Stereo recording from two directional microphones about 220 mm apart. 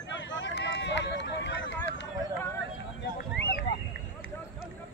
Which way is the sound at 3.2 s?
45° left (ahead or behind).